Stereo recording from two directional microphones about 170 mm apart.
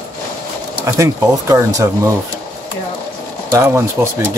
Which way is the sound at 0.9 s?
20° right (ahead or behind).